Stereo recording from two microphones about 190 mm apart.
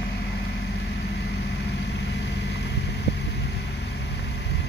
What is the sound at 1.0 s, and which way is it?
Vehicle, 60° left (ahead or behind).